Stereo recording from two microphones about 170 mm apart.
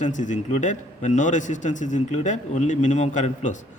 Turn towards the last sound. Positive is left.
turn(degrees=45)  # may be behind; listen again after turning